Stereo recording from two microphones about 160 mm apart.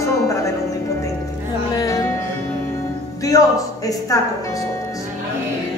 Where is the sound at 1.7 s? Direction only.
20° left (ahead or behind).